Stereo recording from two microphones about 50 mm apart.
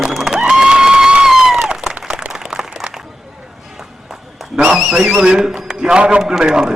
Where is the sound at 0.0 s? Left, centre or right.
Centre.